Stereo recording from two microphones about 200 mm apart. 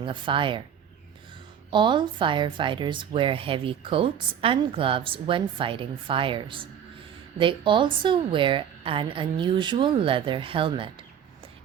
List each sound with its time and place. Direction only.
0.0 s speech: 25° right (ahead or behind)
1.7 s speech: 25° right (ahead or behind)